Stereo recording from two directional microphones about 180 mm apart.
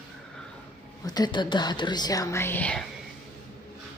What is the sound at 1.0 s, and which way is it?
Speech, 20° left (ahead or behind).